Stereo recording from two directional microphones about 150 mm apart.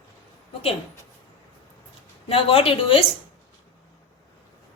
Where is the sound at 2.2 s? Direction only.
40° left (ahead or behind).